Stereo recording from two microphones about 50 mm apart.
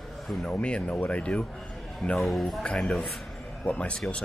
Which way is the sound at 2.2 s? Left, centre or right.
Centre.